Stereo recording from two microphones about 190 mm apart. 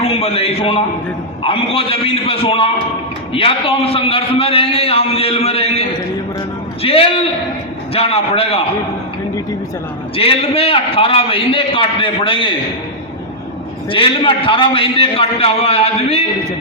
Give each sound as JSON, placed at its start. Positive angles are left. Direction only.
{"t": 0.0, "sound": "a man's voice", "side_deg": 30}
{"t": 6.8, "sound": "a man's voice", "side_deg": 30}
{"t": 10.2, "sound": "a man's voice", "side_deg": 30}
{"t": 13.9, "sound": "a man's voice", "side_deg": 25}